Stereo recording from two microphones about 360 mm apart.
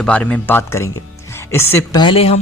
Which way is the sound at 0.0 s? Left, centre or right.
Centre.